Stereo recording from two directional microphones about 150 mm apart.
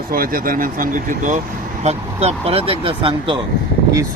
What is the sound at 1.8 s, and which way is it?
Speech, 45° right (ahead or behind).